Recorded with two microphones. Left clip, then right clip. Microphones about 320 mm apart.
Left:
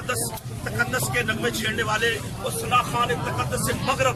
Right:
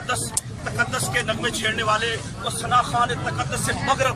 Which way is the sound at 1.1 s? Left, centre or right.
Centre.